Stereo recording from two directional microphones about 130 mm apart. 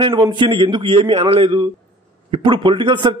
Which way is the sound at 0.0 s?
40° right (ahead or behind).